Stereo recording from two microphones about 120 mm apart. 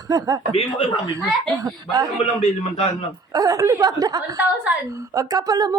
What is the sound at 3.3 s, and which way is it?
Speech, 30° right (ahead or behind).